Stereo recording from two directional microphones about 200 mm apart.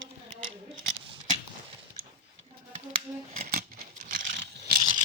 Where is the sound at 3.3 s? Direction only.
40° right (ahead or behind).